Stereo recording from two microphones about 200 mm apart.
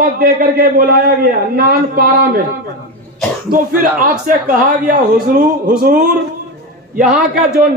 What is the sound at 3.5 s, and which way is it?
A man's voice, 45° right (ahead or behind).